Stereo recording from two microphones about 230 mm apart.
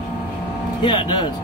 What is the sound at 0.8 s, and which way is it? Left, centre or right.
Speech, left.